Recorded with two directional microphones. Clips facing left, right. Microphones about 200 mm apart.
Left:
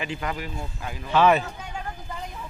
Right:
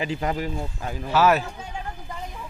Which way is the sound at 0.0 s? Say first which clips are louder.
Right 4 dB; 35° right (ahead or behind).